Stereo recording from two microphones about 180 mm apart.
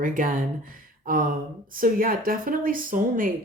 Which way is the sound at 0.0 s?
50° right (ahead or behind).